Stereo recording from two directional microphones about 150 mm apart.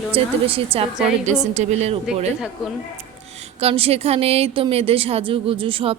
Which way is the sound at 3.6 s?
40° right (ahead or behind).